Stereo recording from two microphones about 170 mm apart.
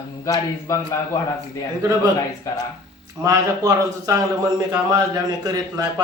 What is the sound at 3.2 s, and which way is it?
A man's voice, 20° right (ahead or behind).